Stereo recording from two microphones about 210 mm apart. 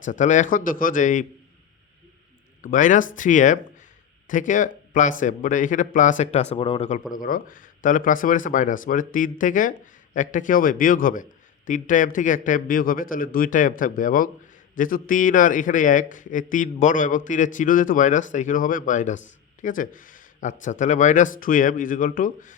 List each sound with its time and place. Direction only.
0.0 s a man's voice: 35° left (ahead or behind)
2.6 s a man's voice: 35° left (ahead or behind)
7.1 s a man's voice: 40° left (ahead or behind)